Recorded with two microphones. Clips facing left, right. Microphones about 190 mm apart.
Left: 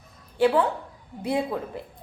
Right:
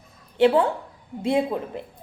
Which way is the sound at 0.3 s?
20° right (ahead or behind).